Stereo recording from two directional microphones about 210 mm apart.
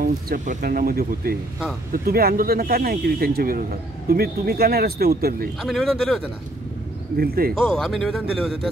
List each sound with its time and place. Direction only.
0.0 s speech: 45° right (ahead or behind)
5.6 s speech: centre (ahead or behind)
7.2 s speech: 45° right (ahead or behind)
7.6 s speech: centre (ahead or behind)